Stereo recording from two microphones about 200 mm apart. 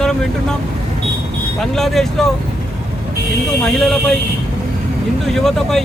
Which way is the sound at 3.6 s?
Centre (ahead or behind).